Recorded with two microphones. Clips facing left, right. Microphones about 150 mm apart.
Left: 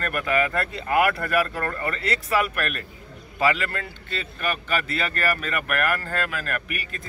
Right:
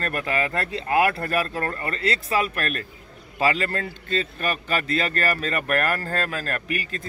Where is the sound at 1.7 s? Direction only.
30° right (ahead or behind).